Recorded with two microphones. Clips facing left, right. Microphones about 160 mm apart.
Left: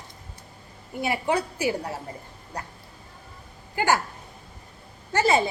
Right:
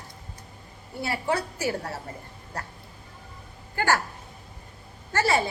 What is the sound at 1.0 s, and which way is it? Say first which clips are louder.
Speech: left 2 dB; 15° left (ahead or behind).